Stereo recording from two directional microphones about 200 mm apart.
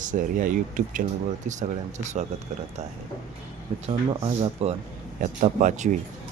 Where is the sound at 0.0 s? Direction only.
40° right (ahead or behind).